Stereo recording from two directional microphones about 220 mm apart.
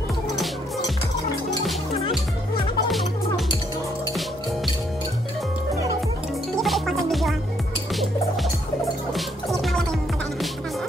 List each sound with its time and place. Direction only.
0.4 s music: centre (ahead or behind)
2.9 s music: centre (ahead or behind)
6.5 s music: centre (ahead or behind)